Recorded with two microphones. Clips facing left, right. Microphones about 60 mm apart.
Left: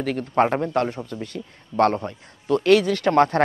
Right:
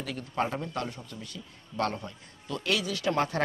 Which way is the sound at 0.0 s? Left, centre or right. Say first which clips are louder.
Left 11 dB; left.